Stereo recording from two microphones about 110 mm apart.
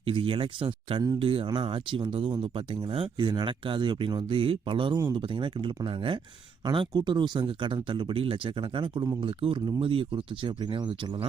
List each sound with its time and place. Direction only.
0.0 s speech: 55° right (ahead or behind)